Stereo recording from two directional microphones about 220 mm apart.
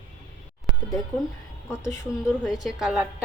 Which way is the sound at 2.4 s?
Centre (ahead or behind).